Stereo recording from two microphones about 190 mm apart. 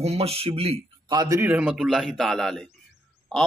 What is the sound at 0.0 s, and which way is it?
A man's voice, 30° right (ahead or behind).